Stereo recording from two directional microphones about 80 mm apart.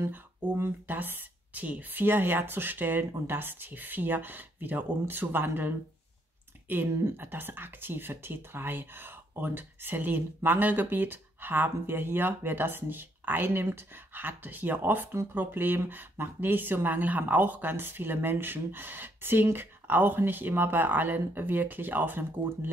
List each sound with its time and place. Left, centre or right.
0.0 s speech: right